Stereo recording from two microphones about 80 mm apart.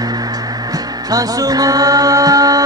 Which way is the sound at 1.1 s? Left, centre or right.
Right.